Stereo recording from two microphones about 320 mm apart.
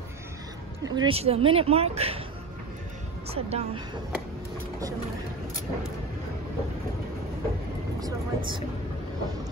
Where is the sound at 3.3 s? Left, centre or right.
Centre.